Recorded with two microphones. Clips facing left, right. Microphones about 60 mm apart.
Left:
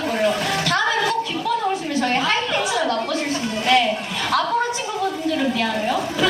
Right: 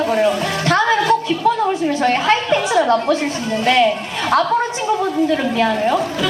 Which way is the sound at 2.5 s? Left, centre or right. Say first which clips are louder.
Right 6 dB; right.